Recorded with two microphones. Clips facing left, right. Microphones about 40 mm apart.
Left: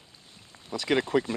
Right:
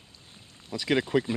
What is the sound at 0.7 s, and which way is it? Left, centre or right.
Speech, centre.